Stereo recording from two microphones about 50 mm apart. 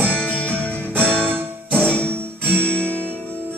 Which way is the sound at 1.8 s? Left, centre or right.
Right.